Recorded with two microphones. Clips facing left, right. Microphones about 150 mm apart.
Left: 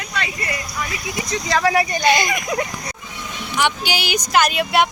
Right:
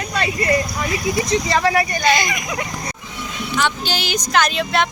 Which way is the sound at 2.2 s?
50° left (ahead or behind).